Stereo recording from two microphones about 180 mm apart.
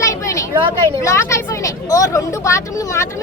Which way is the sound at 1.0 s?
15° left (ahead or behind).